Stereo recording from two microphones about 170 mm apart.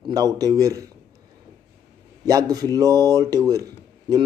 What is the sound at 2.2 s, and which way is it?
Speech, 20° right (ahead or behind).